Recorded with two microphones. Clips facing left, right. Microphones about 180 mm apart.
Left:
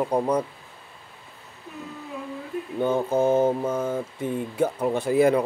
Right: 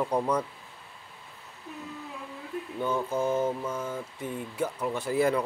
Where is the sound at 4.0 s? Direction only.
25° left (ahead or behind).